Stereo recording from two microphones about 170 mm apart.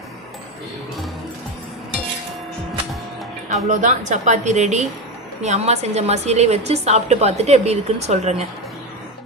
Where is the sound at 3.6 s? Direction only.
45° right (ahead or behind).